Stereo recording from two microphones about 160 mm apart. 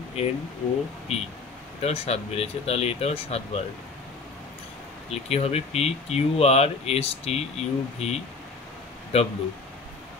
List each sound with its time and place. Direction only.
0.2 s speech: 40° left (ahead or behind)
5.1 s speech: 40° left (ahead or behind)